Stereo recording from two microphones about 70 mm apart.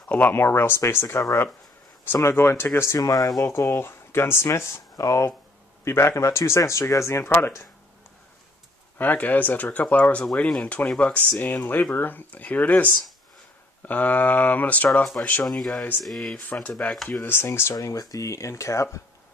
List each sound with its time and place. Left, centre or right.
0.1 s speech: left
3.0 s speech: left
3.4 s speech: left
4.9 s speech: left
5.9 s speech: left
7.2 s speech: left
8.9 s speech: left
13.8 s speech: left
15.4 s speech: centre
16.6 s speech: left
16.9 s speech: centre
17.2 s speech: left
17.7 s speech: left